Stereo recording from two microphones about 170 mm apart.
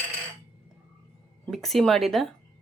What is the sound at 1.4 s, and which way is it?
Speech, centre (ahead or behind).